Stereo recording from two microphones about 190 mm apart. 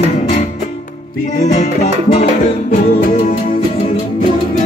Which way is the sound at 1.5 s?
40° left (ahead or behind).